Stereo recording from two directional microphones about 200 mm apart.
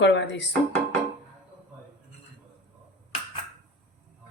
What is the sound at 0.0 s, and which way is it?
Speech, 60° left (ahead or behind).